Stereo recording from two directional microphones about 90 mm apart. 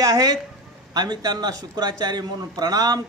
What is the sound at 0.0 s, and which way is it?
A man's voice, 40° right (ahead or behind).